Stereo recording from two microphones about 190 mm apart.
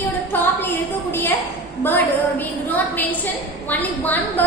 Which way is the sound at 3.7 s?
10° left (ahead or behind).